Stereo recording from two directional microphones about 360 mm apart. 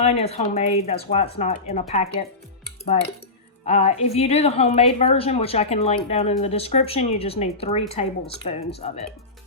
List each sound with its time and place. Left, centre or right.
0.0 s a woman's voice: centre
3.6 s a woman's voice: centre